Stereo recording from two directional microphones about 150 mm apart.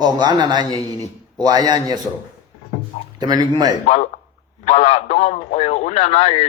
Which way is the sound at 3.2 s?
25° right (ahead or behind).